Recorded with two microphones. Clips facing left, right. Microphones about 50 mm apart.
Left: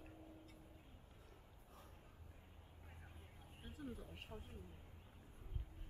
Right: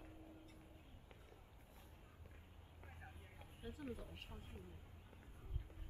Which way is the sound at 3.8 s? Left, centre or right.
Right.